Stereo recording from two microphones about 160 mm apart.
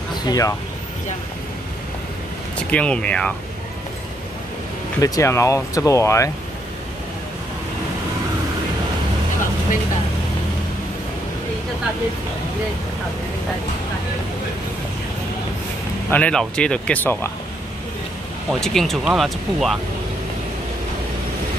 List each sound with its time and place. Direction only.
0.1 s speech: 20° left (ahead or behind)
2.7 s speech: 5° left (ahead or behind)
5.0 s speech: 20° left (ahead or behind)
16.1 s speech: 5° left (ahead or behind)
18.5 s speech: centre (ahead or behind)